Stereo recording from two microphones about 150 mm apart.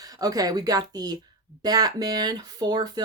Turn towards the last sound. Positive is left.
turn(degrees=-25)  # may be behind; listen again after turning